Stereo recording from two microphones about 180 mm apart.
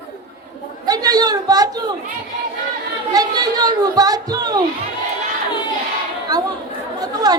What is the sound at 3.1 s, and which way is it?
A woman's voice, 20° right (ahead or behind).